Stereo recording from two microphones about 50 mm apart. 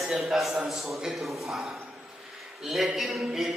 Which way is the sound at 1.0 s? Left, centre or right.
Centre.